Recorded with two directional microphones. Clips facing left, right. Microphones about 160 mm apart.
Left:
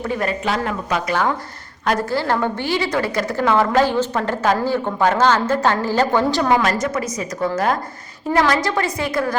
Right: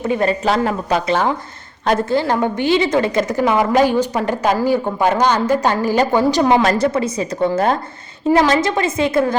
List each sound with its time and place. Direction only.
0.0 s a woman's voice: 25° right (ahead or behind)
6.6 s a woman's voice: 35° right (ahead or behind)